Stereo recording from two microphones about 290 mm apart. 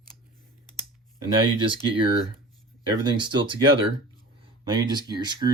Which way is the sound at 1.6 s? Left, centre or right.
Centre.